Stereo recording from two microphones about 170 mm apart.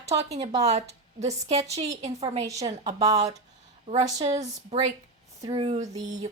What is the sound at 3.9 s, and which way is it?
Speech, 45° right (ahead or behind).